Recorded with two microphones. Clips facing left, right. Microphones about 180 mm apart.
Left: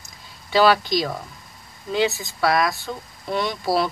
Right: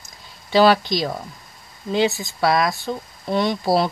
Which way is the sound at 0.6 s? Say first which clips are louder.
Right 2 dB; 25° right (ahead or behind).